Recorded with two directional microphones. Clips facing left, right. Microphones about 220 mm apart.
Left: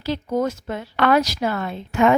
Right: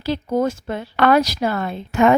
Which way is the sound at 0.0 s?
30° right (ahead or behind).